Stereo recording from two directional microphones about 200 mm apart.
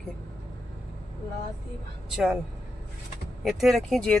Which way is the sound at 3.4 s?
Centre (ahead or behind).